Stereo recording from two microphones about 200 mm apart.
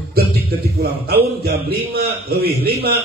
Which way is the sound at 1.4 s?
55° right (ahead or behind).